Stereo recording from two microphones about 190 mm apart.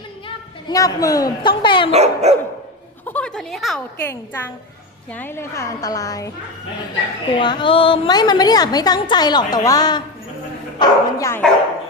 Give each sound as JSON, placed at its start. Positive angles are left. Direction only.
{"t": 0.3, "sound": "a woman's voice", "side_deg": 20}
{"t": 1.9, "sound": "dog", "side_deg": -35}
{"t": 3.1, "sound": "a woman's voice", "side_deg": 5}
{"t": 7.3, "sound": "a woman's voice", "side_deg": 25}